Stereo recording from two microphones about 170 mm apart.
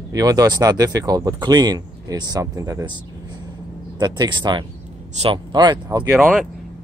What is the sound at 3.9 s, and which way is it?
Speech, 25° right (ahead or behind).